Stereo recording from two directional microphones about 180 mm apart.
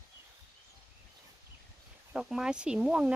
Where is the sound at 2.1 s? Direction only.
5° right (ahead or behind).